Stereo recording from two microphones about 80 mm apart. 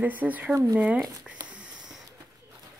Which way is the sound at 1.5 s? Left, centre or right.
Centre.